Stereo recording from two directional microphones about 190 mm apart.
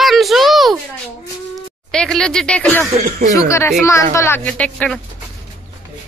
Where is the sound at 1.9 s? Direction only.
5° left (ahead or behind).